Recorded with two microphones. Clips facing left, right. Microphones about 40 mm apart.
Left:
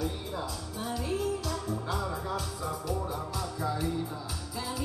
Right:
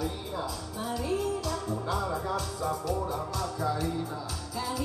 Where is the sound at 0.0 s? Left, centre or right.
Centre.